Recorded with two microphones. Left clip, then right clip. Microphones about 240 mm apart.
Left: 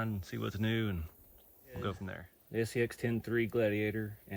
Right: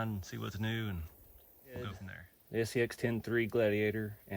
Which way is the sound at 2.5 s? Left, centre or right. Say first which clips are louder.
Even; right.